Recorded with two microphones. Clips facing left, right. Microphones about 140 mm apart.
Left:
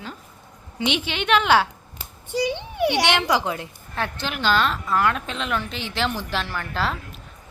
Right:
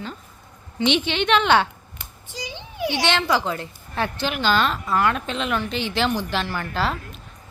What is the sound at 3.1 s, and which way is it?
Speech, 15° left (ahead or behind).